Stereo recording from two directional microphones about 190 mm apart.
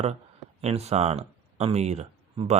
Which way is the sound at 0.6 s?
35° right (ahead or behind).